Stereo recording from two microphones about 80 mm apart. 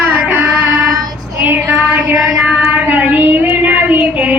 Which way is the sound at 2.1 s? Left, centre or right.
Centre.